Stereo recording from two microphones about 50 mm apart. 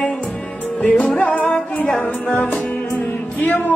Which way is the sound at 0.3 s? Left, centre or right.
Left.